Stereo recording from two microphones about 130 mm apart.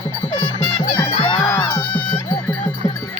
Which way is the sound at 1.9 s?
15° left (ahead or behind).